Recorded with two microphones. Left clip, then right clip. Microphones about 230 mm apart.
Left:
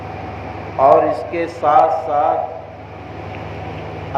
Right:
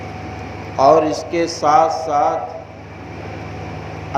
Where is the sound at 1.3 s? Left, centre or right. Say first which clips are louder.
Right 2 dB; right.